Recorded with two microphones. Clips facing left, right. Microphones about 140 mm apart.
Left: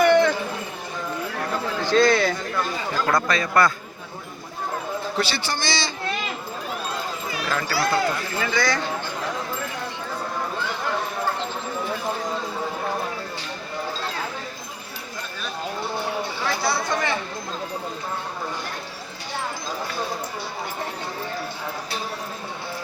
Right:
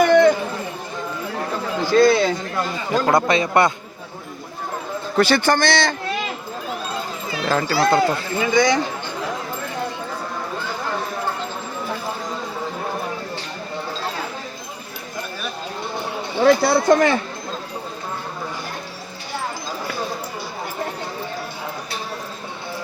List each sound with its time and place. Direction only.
1.8 s speech: 10° right (ahead or behind)
2.9 s speech: 20° right (ahead or behind)
5.1 s a man's voice: 55° right (ahead or behind)
7.3 s speech: 30° right (ahead or behind)
16.4 s speech: 50° right (ahead or behind)